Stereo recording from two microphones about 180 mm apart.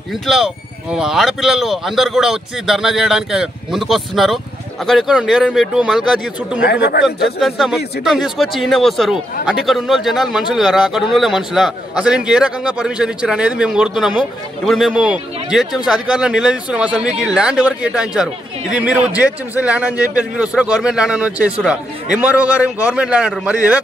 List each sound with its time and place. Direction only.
0.3 s a man's voice: centre (ahead or behind)
6.6 s a man's voice: 60° left (ahead or behind)
7.3 s a man's voice: centre (ahead or behind)